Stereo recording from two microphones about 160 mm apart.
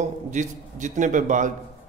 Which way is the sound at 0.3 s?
50° right (ahead or behind).